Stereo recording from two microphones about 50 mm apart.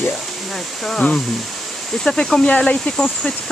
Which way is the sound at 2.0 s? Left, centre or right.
Centre.